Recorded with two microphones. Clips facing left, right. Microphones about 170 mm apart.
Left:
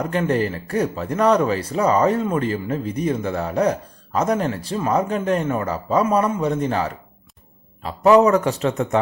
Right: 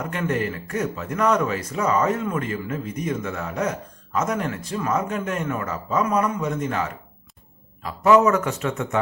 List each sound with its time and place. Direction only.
0.0 s speech: 30° left (ahead or behind)